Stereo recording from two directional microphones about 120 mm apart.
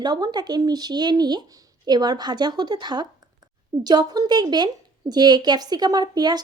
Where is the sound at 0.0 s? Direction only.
35° right (ahead or behind).